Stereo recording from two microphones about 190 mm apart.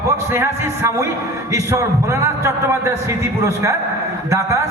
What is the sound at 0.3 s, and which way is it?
A man's voice, 10° right (ahead or behind).